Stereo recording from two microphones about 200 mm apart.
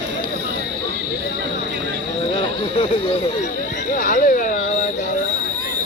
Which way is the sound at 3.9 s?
40° left (ahead or behind).